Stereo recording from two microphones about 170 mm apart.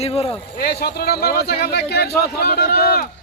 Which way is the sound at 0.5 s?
65° left (ahead or behind).